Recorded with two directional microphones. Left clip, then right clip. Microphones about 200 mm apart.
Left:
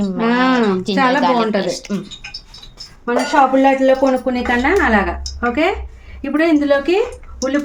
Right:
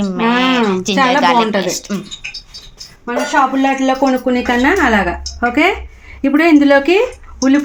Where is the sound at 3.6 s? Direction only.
45° right (ahead or behind).